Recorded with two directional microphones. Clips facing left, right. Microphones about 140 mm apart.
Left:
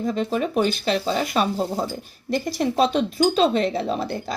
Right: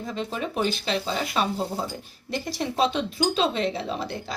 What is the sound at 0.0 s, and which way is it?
Speech, 40° left (ahead or behind).